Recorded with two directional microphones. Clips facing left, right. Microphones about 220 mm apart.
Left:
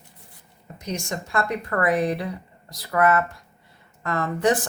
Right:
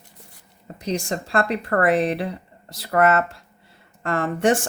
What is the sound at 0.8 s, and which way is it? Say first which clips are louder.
Speech: right 4 dB; 30° right (ahead or behind).